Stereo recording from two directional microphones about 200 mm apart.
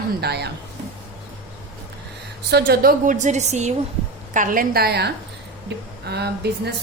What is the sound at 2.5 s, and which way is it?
A woman's voice, 55° right (ahead or behind).